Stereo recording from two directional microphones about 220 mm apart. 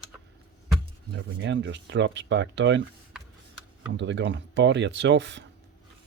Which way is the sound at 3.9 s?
55° right (ahead or behind).